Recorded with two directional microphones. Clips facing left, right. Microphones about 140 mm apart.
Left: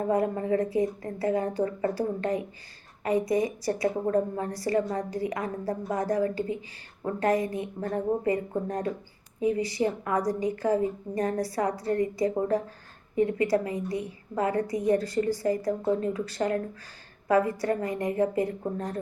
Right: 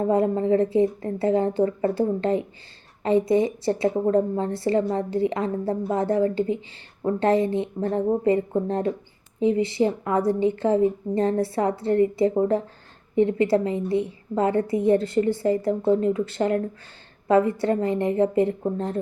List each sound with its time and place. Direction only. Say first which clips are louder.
0.0 s a woman's voice: right 5 dB; 25° right (ahead or behind)